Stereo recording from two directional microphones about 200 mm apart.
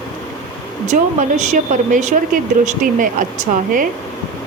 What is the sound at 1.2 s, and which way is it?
Speech, 40° right (ahead or behind).